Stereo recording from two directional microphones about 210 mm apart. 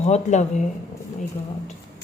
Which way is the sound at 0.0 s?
35° left (ahead or behind).